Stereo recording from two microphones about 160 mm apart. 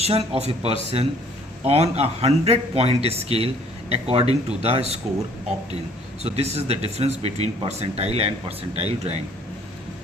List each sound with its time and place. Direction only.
0.0 s speech: 40° right (ahead or behind)
6.2 s speech: 40° right (ahead or behind)